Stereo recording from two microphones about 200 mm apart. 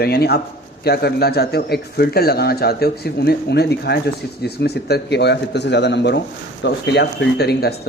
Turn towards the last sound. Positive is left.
turn(degrees=55)  # may be behind; listen again after turning